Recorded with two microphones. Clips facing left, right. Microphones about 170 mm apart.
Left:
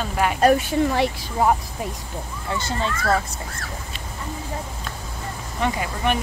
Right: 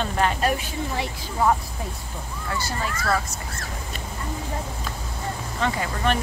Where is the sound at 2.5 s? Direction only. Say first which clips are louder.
Left 3 dB; 25° left (ahead or behind).